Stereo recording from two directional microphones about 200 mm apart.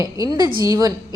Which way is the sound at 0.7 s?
15° right (ahead or behind).